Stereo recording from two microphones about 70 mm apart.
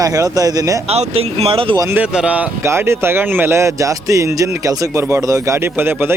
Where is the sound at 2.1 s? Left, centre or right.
Centre.